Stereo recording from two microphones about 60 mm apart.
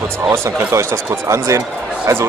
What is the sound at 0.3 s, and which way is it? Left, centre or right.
Speech, right.